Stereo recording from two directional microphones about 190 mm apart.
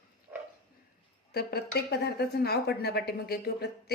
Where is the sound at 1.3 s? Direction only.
55° left (ahead or behind).